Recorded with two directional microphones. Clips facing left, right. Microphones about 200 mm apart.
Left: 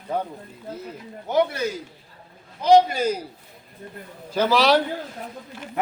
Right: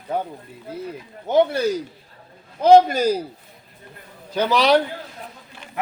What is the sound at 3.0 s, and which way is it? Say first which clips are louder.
Speech: right 4 dB; 35° right (ahead or behind).